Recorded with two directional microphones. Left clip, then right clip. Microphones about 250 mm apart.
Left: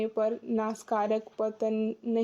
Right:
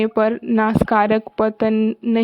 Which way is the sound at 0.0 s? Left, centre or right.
Right.